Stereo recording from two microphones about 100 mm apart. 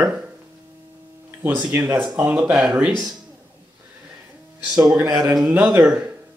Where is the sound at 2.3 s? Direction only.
5° right (ahead or behind).